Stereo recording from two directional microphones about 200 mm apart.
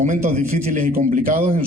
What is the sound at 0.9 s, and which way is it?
Speech, 45° right (ahead or behind).